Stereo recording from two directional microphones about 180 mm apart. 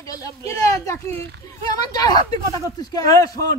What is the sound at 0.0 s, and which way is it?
Speech, 20° left (ahead or behind).